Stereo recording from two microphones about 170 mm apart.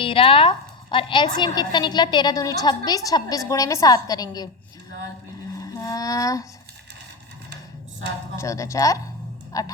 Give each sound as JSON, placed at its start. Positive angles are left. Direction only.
{"t": 0.0, "sound": "a woman's voice", "side_deg": 30}
{"t": 5.8, "sound": "a woman's voice", "side_deg": 20}
{"t": 8.4, "sound": "a woman's voice", "side_deg": 20}
{"t": 9.5, "sound": "music", "side_deg": 20}